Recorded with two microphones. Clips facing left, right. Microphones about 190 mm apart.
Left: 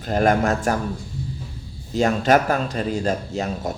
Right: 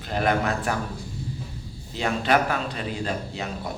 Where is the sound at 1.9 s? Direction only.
45° left (ahead or behind).